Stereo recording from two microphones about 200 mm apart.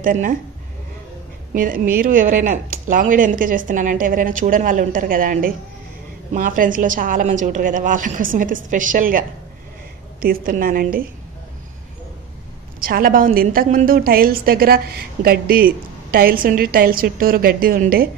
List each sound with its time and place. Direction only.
0.0 s a woman's voice: 40° right (ahead or behind)
1.5 s a woman's voice: 45° right (ahead or behind)
10.2 s a woman's voice: 45° right (ahead or behind)
12.8 s a woman's voice: 45° right (ahead or behind)